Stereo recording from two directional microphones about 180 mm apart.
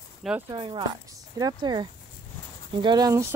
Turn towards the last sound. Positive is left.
turn(degrees=-20)  # may be behind; listen again after turning